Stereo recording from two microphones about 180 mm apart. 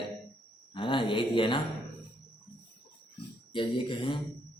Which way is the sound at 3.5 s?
25° left (ahead or behind).